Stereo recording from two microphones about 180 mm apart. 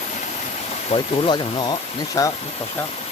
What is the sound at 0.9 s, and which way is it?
Speech, 25° left (ahead or behind).